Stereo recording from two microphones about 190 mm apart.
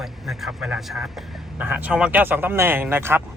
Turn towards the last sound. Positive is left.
turn(degrees=-10)  # may be behind; listen again after turning